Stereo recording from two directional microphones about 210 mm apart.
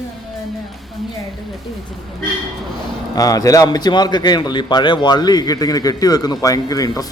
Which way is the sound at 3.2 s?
15° left (ahead or behind).